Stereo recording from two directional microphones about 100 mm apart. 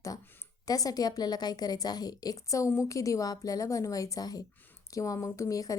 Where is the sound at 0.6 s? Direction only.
40° left (ahead or behind).